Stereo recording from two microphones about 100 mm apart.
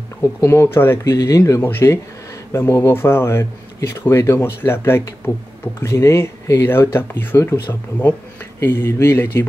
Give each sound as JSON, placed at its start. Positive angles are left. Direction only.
{"t": 0.4, "sound": "speech", "side_deg": 30}